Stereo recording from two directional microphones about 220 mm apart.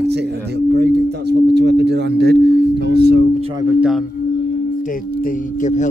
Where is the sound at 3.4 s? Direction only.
20° right (ahead or behind).